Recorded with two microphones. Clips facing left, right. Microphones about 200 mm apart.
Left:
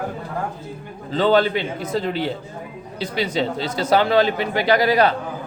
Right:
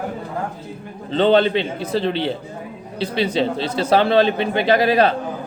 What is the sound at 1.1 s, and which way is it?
A man's voice, 25° right (ahead or behind).